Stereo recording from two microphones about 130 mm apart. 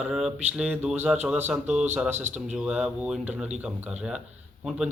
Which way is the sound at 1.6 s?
65° right (ahead or behind).